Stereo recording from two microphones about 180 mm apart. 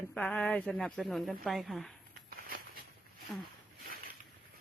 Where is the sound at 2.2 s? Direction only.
55° right (ahead or behind).